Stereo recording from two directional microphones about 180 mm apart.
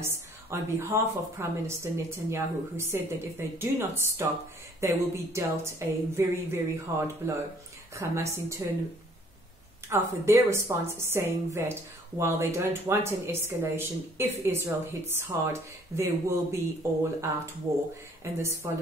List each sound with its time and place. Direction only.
0.0 s a sound: 15° right (ahead or behind)
1.4 s a woman's voice: 15° right (ahead or behind)
9.8 s a woman's voice: 15° right (ahead or behind)
18.2 s a woman's voice: 15° right (ahead or behind)